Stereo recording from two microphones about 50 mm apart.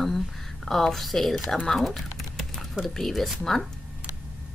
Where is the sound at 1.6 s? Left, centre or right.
Centre.